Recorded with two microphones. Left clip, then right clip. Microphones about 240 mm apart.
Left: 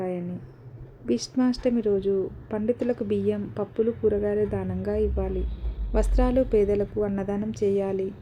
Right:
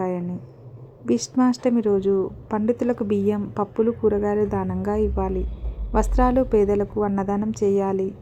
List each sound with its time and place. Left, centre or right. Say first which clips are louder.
1.0 s a woman's voice: right 4 dB; centre